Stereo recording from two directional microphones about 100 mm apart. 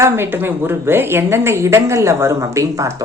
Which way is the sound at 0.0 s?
25° right (ahead or behind).